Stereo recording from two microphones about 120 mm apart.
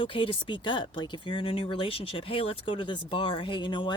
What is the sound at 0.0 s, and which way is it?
Speech, 45° left (ahead or behind).